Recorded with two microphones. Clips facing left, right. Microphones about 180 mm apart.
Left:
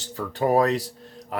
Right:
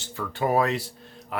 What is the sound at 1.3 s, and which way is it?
Music, 40° left (ahead or behind).